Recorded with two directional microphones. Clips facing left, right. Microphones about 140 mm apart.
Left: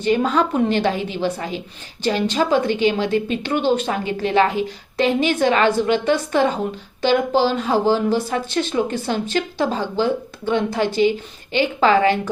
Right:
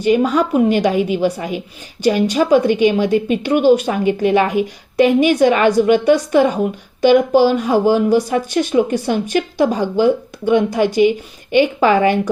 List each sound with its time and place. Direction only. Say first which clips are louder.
0.0 s a woman's voice: right 4 dB; 10° right (ahead or behind)